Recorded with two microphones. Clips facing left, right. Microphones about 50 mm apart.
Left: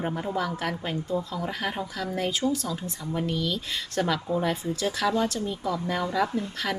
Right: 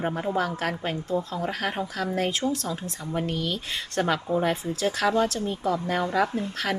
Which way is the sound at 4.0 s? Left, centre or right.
Right.